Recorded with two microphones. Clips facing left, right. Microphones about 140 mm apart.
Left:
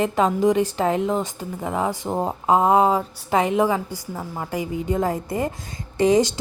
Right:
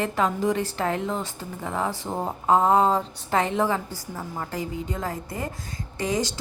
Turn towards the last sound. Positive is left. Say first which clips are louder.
# left 9 dB
turn(degrees=20)  # may be behind; listen again after turning